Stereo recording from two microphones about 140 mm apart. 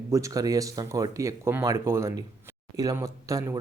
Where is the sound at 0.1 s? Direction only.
25° right (ahead or behind).